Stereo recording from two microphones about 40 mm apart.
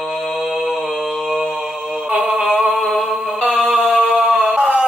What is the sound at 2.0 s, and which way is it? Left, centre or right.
Mantra, right.